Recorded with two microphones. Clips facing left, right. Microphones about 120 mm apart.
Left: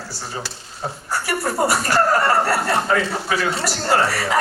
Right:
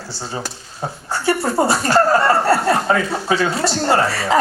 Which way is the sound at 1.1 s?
25° right (ahead or behind).